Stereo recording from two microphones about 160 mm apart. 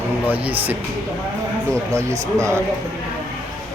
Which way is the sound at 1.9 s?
20° right (ahead or behind).